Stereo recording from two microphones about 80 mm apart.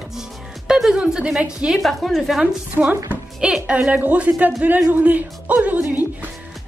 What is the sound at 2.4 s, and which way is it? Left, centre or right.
A woman's voice, centre.